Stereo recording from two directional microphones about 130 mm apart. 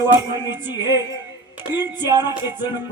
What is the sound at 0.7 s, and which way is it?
Speech, 35° left (ahead or behind).